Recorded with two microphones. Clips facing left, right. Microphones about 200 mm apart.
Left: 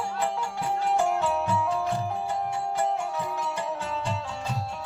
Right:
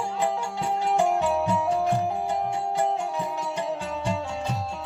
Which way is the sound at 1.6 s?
35° right (ahead or behind).